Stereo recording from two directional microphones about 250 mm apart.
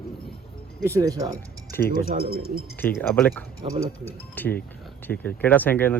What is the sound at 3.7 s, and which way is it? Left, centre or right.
Speech, centre.